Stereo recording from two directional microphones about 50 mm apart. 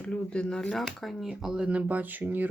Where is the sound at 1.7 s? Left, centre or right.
Right.